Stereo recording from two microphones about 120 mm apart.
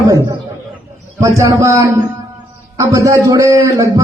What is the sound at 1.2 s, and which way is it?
A man's voice, 25° right (ahead or behind).